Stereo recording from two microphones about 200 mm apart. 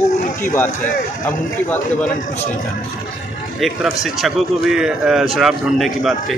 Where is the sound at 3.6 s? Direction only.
Centre (ahead or behind).